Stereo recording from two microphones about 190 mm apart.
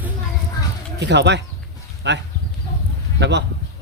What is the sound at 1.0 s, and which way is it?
Speech, 65° right (ahead or behind).